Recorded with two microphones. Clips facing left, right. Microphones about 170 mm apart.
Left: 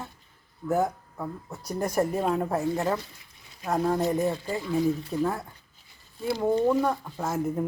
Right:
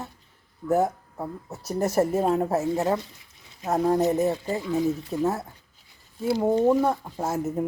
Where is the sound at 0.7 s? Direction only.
Centre (ahead or behind).